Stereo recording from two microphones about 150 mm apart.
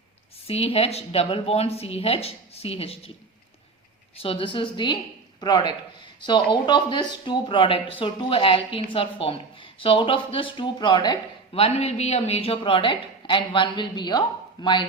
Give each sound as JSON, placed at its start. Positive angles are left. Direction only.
{"t": 0.4, "sound": "a woman's voice", "side_deg": 40}
{"t": 4.2, "sound": "a woman's voice", "side_deg": 35}
{"t": 11.6, "sound": "a woman's voice", "side_deg": 45}